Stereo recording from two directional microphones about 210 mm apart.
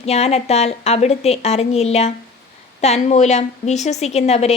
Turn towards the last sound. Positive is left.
turn(degrees=30)  # may be behind; listen again after turning